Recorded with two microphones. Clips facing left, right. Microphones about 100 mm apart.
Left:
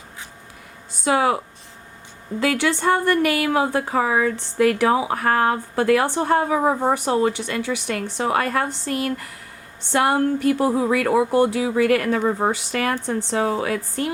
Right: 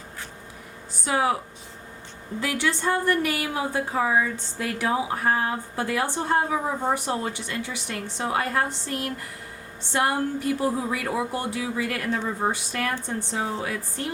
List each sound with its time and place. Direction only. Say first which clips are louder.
1.0 s speech: left 5 dB; 70° left (ahead or behind)
2.4 s speech: left 6 dB; 75° left (ahead or behind)